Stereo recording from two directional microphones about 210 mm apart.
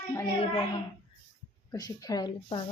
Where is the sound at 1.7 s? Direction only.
15° left (ahead or behind).